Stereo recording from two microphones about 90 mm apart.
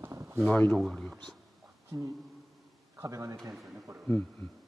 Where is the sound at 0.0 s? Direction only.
30° right (ahead or behind).